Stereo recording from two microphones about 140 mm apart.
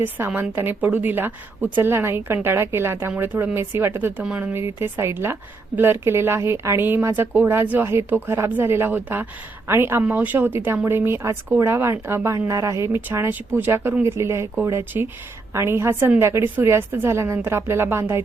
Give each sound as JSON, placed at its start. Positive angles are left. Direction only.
{"t": 0.0, "sound": "a woman's voice", "side_deg": -15}